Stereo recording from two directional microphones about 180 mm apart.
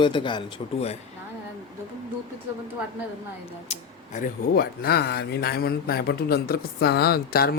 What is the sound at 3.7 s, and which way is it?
Speech, 45° left (ahead or behind).